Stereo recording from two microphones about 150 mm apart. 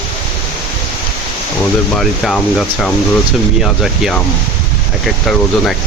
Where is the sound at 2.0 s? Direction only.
Centre (ahead or behind).